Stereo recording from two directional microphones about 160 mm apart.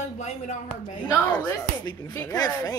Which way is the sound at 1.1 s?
10° left (ahead or behind).